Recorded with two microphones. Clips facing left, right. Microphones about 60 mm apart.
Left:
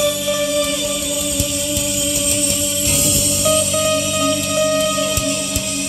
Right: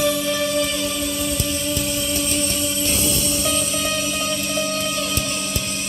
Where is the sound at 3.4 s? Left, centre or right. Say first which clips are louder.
Left 6 dB; centre.